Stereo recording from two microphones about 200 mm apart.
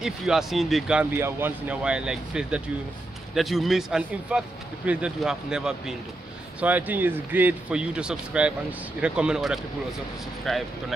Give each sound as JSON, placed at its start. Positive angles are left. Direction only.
{"t": 0.0, "sound": "speech", "side_deg": 0}